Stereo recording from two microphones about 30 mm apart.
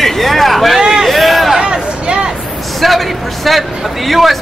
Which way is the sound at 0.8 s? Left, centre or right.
Centre.